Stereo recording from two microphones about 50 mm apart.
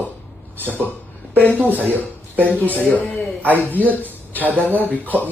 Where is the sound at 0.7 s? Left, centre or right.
Left.